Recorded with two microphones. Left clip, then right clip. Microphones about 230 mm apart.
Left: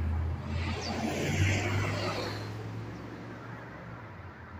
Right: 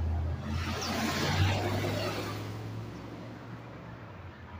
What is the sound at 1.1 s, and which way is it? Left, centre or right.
Music, right.